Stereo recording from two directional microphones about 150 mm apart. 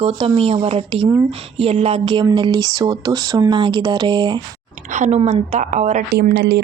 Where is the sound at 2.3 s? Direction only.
30° right (ahead or behind).